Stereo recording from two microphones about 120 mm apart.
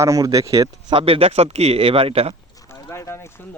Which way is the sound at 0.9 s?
50° right (ahead or behind).